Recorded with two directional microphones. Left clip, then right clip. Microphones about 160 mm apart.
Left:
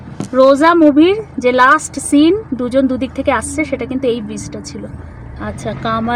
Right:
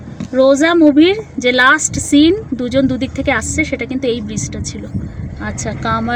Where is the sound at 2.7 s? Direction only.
15° right (ahead or behind).